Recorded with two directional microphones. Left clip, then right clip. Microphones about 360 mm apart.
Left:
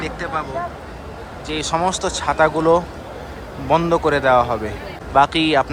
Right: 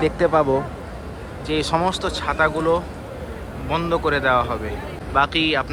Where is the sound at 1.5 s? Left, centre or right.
Centre.